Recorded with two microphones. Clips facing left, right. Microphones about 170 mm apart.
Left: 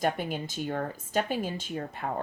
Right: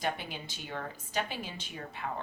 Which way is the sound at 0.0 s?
45° left (ahead or behind).